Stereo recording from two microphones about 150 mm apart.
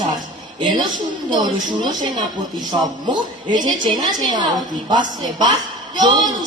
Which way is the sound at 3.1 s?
30° right (ahead or behind).